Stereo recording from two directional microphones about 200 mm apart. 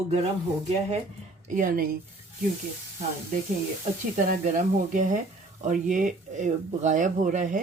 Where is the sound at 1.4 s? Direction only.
40° right (ahead or behind).